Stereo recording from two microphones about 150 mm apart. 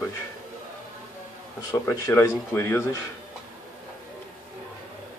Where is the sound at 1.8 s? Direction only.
20° left (ahead or behind).